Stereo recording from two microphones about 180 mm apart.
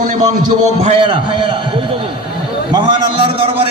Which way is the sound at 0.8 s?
30° right (ahead or behind).